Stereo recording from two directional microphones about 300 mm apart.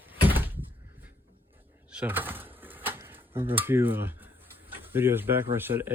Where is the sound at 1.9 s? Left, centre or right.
Centre.